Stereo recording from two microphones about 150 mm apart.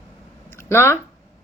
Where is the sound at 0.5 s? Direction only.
15° left (ahead or behind).